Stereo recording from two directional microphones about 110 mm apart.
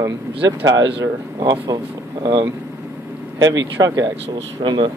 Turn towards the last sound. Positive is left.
turn(degrees=-45)  # may be behind; listen again after turning